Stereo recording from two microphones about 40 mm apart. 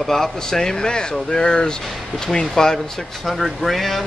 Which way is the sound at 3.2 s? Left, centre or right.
Centre.